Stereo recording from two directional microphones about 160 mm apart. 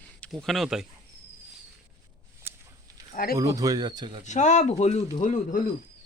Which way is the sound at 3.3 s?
20° right (ahead or behind).